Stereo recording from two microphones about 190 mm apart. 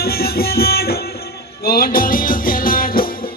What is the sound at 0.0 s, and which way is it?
Music, 55° left (ahead or behind).